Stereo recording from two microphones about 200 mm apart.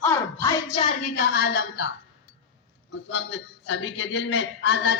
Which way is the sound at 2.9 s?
70° left (ahead or behind).